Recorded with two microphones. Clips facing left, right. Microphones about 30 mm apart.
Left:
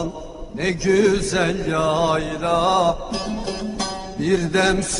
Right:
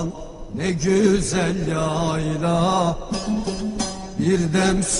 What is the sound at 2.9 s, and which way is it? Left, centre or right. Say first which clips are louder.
Music: even; left.